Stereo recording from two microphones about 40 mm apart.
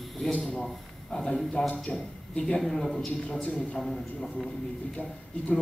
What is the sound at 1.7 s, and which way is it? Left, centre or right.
Speech, left.